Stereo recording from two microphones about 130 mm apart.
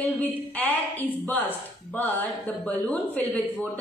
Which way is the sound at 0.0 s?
15° left (ahead or behind).